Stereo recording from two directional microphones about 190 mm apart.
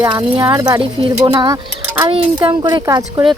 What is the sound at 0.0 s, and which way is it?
Speech, 20° right (ahead or behind).